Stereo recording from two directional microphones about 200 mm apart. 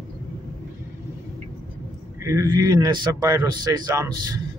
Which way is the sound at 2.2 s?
15° right (ahead or behind).